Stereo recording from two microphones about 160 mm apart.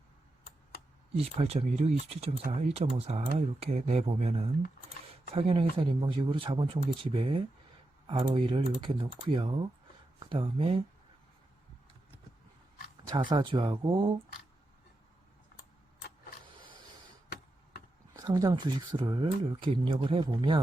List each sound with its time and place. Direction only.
1.1 s speech: 40° right (ahead or behind)
13.3 s speech: 30° right (ahead or behind)
18.2 s speech: 20° right (ahead or behind)